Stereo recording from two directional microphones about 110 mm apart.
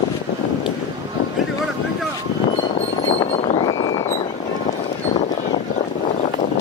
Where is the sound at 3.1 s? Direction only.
55° left (ahead or behind).